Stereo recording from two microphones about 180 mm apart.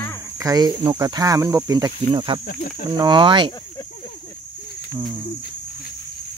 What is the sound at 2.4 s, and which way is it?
Speech, 55° left (ahead or behind).